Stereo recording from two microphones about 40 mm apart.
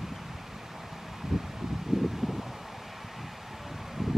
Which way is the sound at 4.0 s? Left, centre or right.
Centre.